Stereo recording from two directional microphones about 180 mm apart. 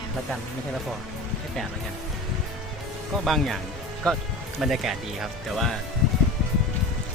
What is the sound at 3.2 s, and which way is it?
Speech, centre (ahead or behind).